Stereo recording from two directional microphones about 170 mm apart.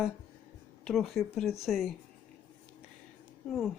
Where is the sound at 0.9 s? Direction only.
Centre (ahead or behind).